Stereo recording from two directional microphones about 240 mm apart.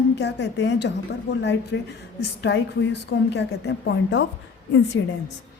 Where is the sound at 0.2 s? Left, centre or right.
Left.